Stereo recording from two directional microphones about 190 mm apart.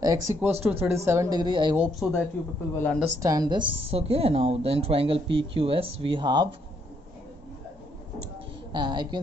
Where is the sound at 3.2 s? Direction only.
20° right (ahead or behind).